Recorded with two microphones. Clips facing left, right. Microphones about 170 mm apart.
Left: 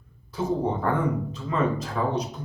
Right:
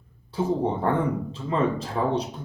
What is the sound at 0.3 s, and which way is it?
Speech, 30° right (ahead or behind).